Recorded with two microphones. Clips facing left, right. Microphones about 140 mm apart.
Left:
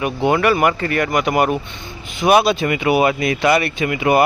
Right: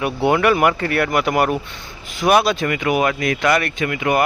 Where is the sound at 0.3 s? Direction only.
5° right (ahead or behind).